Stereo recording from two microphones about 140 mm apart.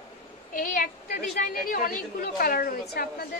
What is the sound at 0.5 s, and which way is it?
A woman's voice, 80° left.